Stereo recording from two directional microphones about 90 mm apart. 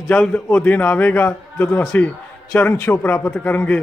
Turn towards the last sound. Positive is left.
turn(degrees=15)  # may be behind; listen again after turning